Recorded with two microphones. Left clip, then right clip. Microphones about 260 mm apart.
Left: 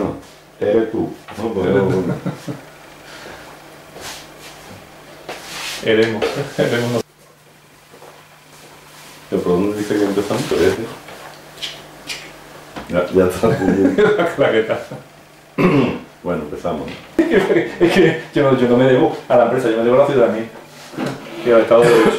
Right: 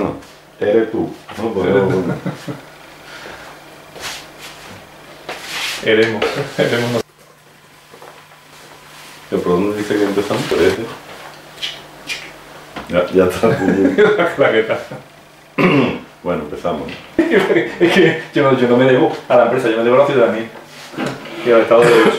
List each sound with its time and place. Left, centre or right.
0.0 s speech: centre
5.3 s a sound: centre
6.2 s speech: centre
6.7 s speech: right
9.3 s speech: right
13.1 s speech: centre
15.5 s throat clearing: centre
16.3 s speech: centre
17.3 s speech: centre
18.4 s speech: centre